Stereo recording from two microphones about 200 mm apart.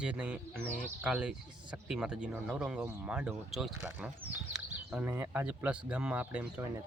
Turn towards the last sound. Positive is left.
turn(degrees=-5)  # may be behind; listen again after turning